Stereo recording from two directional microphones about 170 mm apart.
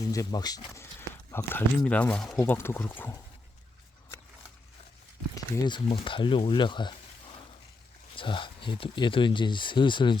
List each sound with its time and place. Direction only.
0.1 s speech: 20° left (ahead or behind); by 2.4 s 5° left (ahead or behind)
2.4 s speech: 15° left (ahead or behind)
5.3 s speech: 25° left (ahead or behind)